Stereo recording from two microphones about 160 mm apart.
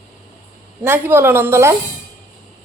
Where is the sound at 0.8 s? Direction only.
15° right (ahead or behind).